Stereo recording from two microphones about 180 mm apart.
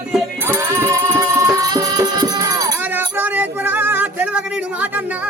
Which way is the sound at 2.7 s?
10° right (ahead or behind).